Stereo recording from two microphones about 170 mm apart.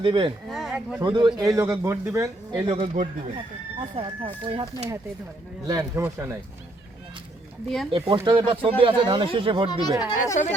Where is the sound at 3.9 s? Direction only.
30° right (ahead or behind).